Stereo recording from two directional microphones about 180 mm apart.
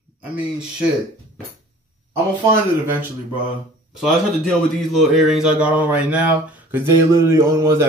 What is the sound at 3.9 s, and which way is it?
A man's voice, centre (ahead or behind).